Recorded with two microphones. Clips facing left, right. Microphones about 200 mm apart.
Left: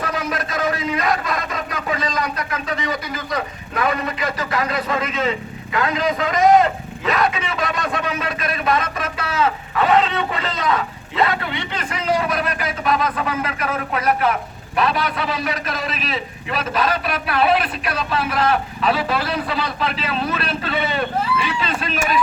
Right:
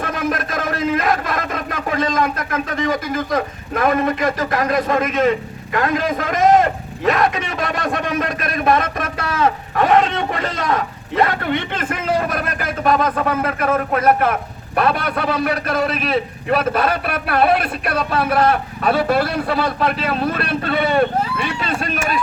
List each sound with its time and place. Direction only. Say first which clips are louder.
0.0 s a man's voice: right 3 dB; 50° right (ahead or behind)